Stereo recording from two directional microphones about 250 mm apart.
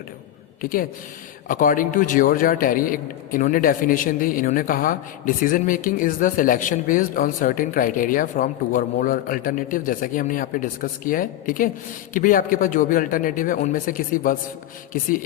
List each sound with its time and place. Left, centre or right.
0.6 s a man's voice: left